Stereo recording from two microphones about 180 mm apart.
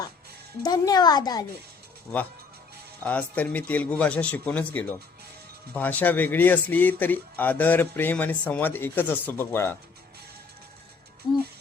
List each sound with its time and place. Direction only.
0.6 s speech: 20° left (ahead or behind)
3.0 s speech: 10° left (ahead or behind)